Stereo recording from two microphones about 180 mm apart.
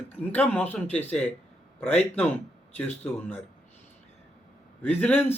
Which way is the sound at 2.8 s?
10° left (ahead or behind).